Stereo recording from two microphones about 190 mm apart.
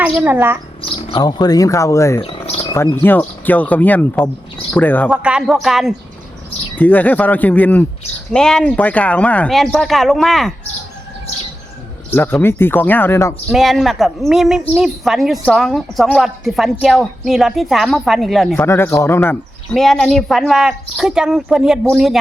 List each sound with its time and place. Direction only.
0.0 s speech: 10° right (ahead or behind)
0.8 s speech: 25° left (ahead or behind)
2.2 s a sound: 30° left (ahead or behind)
2.7 s speech: 10° left (ahead or behind)
5.0 s a woman's voice: 5° right (ahead or behind)
12.1 s speech: 10° left (ahead or behind)
13.5 s a woman's voice: centre (ahead or behind)
18.6 s a woman's voice: 10° left (ahead or behind)